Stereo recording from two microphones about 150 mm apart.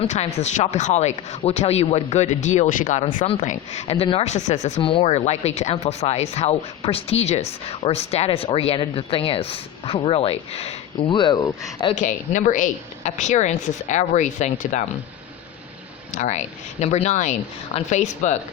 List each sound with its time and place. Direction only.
0.0 s speech: 45° left (ahead or behind)
4.8 s speech: 35° left (ahead or behind)
11.9 s a woman's voice: 55° left (ahead or behind)
16.1 s speech: 55° left (ahead or behind)